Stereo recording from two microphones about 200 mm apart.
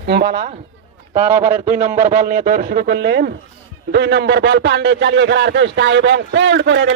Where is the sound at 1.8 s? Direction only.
35° right (ahead or behind).